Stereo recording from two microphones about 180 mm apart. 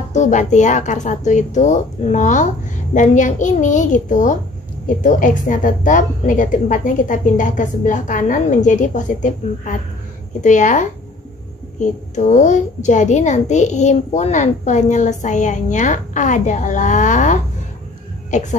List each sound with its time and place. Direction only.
0.1 s a woman's voice: 40° left (ahead or behind)